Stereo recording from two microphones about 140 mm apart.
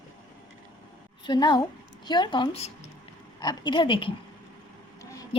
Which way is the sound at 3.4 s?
30° left (ahead or behind).